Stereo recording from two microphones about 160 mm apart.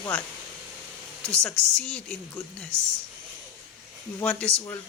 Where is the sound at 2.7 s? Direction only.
20° right (ahead or behind).